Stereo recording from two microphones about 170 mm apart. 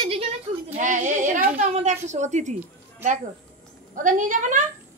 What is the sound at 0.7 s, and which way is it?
A woman's voice, 45° right (ahead or behind).